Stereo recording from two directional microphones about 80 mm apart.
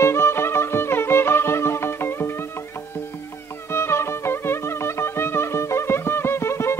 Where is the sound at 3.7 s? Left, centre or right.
Left.